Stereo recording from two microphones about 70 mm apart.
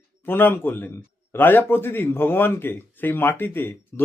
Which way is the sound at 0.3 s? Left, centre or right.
Left.